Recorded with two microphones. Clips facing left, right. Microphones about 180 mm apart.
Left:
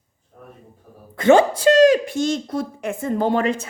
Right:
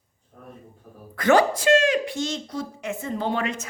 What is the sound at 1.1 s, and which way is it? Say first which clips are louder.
Speech: left 5 dB; 25° left (ahead or behind).